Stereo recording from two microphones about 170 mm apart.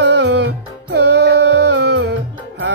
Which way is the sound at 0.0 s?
85° right.